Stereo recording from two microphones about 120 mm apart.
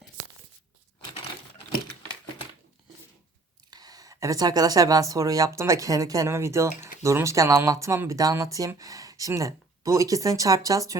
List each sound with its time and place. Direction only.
3.7 s speech: 30° right (ahead or behind)